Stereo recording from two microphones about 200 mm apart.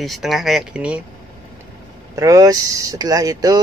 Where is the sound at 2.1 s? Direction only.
15° right (ahead or behind).